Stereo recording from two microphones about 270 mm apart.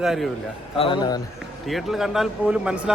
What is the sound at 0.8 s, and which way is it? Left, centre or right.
Speech, centre.